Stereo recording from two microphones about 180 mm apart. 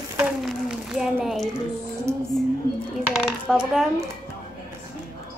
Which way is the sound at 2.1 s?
15° right (ahead or behind).